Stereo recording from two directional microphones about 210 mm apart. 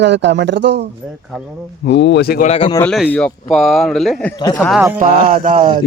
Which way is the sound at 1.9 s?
55° left (ahead or behind).